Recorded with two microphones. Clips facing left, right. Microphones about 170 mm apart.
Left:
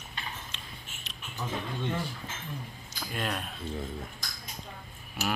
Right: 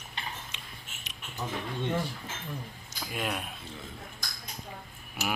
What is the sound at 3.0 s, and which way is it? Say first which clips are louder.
Speech: even; 5° right (ahead or behind).